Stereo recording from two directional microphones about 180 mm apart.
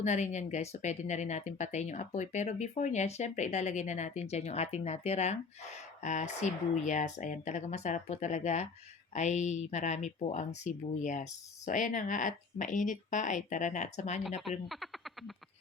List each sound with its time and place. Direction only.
0.0 s speech: 40° left (ahead or behind)